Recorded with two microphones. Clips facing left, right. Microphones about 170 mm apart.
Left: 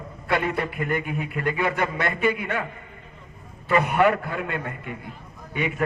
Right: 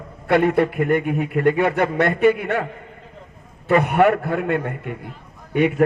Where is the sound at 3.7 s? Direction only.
55° right (ahead or behind).